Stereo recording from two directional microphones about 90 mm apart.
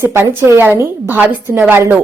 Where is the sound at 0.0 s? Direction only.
30° right (ahead or behind).